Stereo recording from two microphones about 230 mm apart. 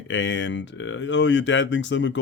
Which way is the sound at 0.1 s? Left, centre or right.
Left.